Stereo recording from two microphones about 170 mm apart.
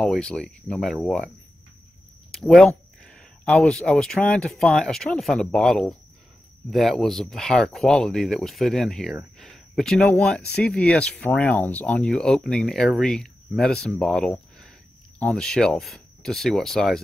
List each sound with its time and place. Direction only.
0.0 s speech: 5° left (ahead or behind)
2.3 s speech: centre (ahead or behind)